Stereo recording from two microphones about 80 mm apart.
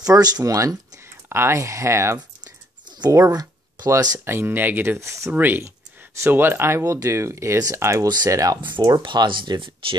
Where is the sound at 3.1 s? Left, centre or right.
Right.